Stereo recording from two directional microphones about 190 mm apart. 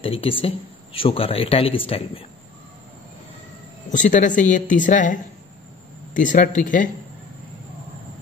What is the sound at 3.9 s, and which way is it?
Speech, 40° left (ahead or behind).